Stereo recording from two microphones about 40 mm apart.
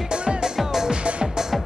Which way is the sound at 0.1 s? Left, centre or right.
Right.